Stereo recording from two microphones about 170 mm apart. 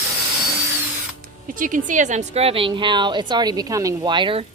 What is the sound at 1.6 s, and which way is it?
A woman's voice, 50° right (ahead or behind).